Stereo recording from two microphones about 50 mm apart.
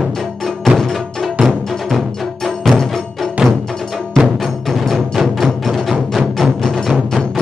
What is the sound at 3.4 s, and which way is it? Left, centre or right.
Music, centre.